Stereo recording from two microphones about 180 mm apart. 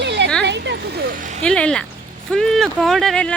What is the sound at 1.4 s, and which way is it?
Speech, 5° left (ahead or behind).